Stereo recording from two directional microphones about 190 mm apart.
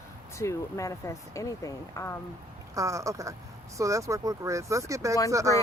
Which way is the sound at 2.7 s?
15° right (ahead or behind).